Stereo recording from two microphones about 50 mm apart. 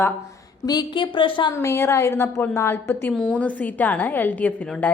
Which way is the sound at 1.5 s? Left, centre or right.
Left.